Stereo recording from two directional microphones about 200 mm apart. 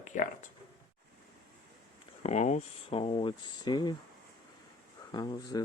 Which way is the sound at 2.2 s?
35° left (ahead or behind).